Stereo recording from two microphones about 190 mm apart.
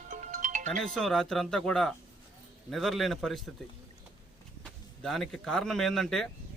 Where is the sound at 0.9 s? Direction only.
Centre (ahead or behind).